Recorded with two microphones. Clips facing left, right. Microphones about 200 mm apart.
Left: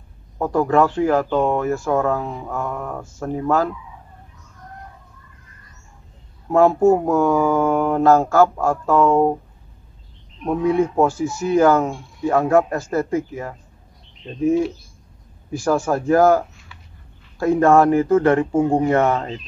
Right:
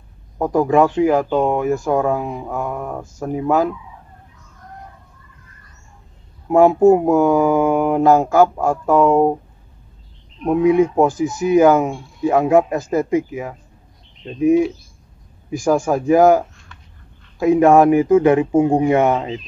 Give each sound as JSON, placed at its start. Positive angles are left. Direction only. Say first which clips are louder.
{"t": 0.4, "sound": "speech", "louder": "right 2 dB", "side_deg": -15}
{"t": 6.5, "sound": "speech", "louder": "right 3 dB", "side_deg": -15}
{"t": 10.4, "sound": "speech", "louder": "right 4 dB", "side_deg": -15}
{"t": 15.5, "sound": "speech", "louder": "right 3 dB", "side_deg": -15}